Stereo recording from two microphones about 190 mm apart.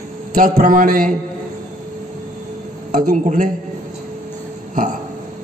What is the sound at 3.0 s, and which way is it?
Speech, 40° right (ahead or behind).